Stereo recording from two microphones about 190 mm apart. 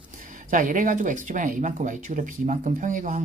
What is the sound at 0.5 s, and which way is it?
Speech, 45° right (ahead or behind).